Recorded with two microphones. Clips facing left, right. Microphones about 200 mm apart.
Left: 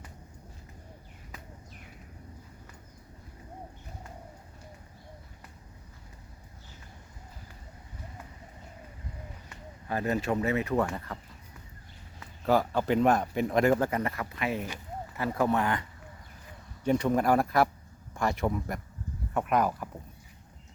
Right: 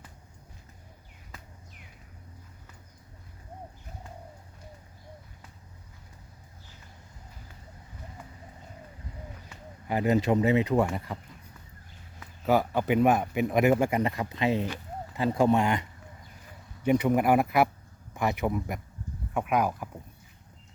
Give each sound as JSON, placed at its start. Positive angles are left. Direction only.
{"t": 9.9, "sound": "speech", "side_deg": -20}
{"t": 12.7, "sound": "speech", "side_deg": -10}